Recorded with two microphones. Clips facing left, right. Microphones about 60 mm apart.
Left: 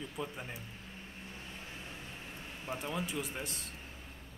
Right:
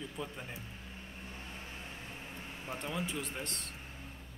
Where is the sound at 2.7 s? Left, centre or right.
Centre.